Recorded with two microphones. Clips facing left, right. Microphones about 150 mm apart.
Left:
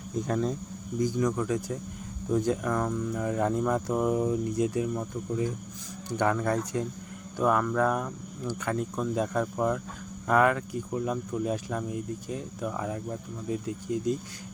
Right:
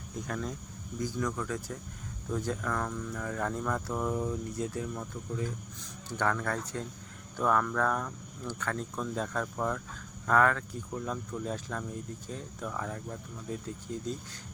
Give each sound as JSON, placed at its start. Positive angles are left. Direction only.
{"t": 0.3, "sound": "speech", "side_deg": 30}